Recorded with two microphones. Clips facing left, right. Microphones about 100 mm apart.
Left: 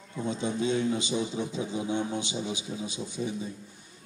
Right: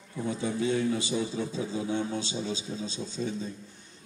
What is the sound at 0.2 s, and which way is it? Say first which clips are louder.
A man's voice: even; 20° left (ahead or behind).